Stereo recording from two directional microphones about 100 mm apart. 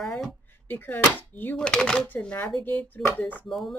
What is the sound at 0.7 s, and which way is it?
Speech, 20° left (ahead or behind).